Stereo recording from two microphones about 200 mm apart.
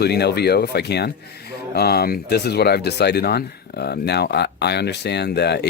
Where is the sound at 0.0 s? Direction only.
55° left (ahead or behind).